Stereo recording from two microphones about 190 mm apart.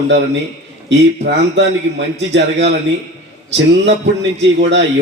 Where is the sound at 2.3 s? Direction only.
70° right (ahead or behind).